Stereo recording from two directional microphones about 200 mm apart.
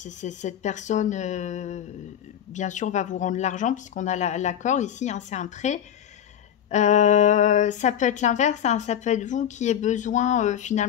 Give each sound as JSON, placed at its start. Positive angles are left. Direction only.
{"t": 0.0, "sound": "speech", "side_deg": 35}